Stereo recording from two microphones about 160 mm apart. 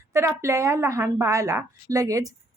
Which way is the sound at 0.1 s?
15° right (ahead or behind).